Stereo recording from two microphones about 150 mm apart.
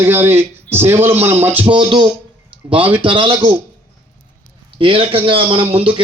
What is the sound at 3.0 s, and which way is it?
Speech, 35° right (ahead or behind).